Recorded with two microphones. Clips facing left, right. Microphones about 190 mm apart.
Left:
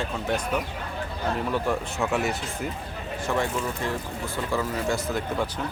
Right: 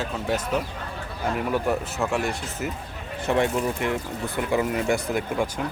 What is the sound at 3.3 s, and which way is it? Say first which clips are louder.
Speech: right 5 dB; 20° right (ahead or behind).